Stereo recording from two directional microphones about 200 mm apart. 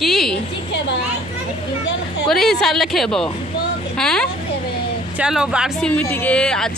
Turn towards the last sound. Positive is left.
turn(degrees=5)  # may be behind; listen again after turning